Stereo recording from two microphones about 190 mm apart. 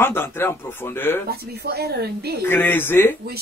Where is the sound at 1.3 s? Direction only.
55° right (ahead or behind).